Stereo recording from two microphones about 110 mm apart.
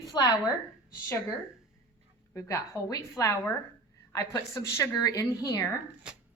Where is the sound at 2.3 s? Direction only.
30° left (ahead or behind).